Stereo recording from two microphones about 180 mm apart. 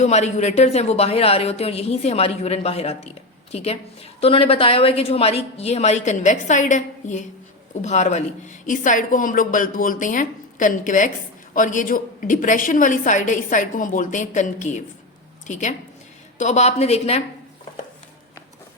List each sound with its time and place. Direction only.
0.0 s a woman's voice: 40° left (ahead or behind)